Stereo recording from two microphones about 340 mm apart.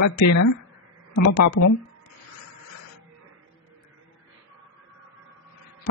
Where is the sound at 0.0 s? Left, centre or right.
Left.